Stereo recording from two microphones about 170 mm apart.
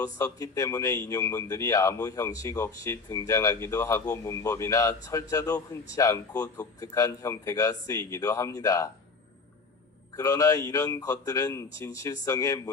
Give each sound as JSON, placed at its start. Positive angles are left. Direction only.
{"t": 0.0, "sound": "speech", "side_deg": 20}
{"t": 10.2, "sound": "speech", "side_deg": 20}